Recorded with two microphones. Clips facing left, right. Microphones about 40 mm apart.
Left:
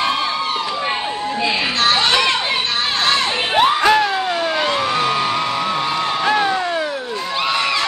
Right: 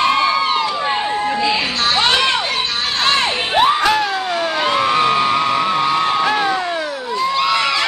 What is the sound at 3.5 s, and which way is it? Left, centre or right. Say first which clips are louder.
Crowd: left 1 dB; centre.